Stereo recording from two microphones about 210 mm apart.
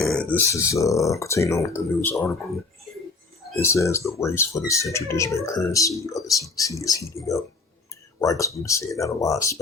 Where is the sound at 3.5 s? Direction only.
15° left (ahead or behind).